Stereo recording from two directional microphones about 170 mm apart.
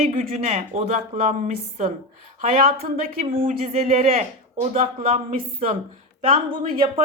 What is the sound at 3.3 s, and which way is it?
Speech, 40° right (ahead or behind).